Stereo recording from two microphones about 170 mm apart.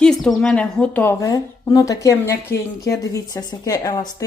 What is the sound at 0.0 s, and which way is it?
A woman's voice, 5° left (ahead or behind).